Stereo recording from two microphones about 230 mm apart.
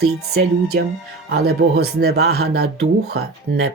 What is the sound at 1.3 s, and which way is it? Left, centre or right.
Speech, right.